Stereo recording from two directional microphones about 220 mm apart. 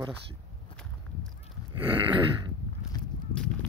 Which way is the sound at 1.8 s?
25° right (ahead or behind).